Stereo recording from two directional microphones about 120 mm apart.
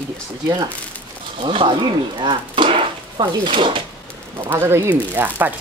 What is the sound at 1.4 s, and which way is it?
Speech, 45° right (ahead or behind).